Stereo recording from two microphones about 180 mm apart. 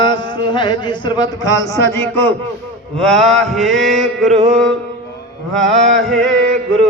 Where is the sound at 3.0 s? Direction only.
5° left (ahead or behind).